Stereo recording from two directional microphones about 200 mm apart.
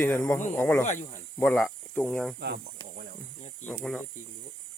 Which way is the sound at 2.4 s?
55° right (ahead or behind).